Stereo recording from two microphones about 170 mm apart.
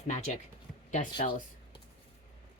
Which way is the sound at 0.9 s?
45° left (ahead or behind).